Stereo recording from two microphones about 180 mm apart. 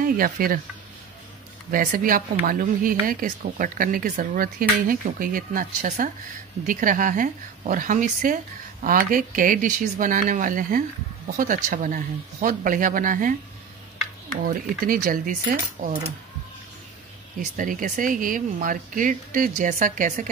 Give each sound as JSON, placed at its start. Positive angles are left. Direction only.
{"t": 0.0, "sound": "speech", "side_deg": -50}
{"t": 1.7, "sound": "speech", "side_deg": -50}
{"t": 14.4, "sound": "speech", "side_deg": -50}
{"t": 17.6, "sound": "speech", "side_deg": -45}